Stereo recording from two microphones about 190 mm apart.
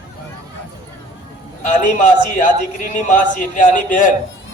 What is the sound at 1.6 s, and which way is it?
A man's voice, 40° left (ahead or behind).